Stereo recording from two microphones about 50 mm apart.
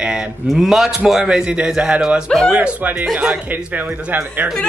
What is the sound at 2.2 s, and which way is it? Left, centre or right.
Speech, centre.